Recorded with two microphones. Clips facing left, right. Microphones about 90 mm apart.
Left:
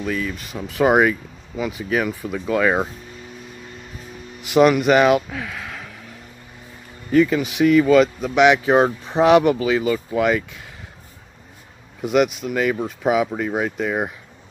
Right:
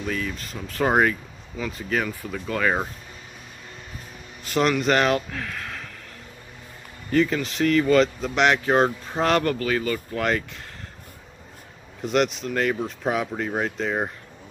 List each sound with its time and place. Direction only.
0.0 s speech: centre (ahead or behind); by 2.9 s 20° left (ahead or behind)
4.5 s speech: 10° left (ahead or behind)
7.1 s speech: 5° left (ahead or behind)
12.0 s speech: 5° left (ahead or behind)